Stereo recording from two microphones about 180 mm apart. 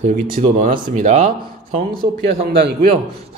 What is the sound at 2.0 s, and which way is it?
Speech, 30° right (ahead or behind).